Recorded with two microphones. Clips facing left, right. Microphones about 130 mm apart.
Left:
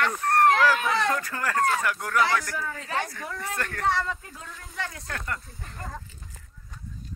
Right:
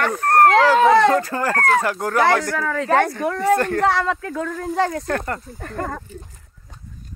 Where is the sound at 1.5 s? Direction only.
70° right (ahead or behind).